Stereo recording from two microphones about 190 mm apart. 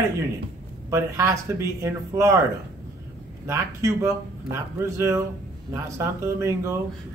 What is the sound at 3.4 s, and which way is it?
Speech, 15° right (ahead or behind).